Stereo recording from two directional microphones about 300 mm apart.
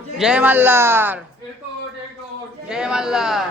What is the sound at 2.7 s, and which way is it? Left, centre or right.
Speech, centre.